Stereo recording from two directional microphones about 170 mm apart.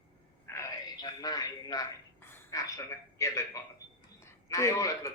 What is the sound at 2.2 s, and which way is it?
A man's voice, 15° left (ahead or behind).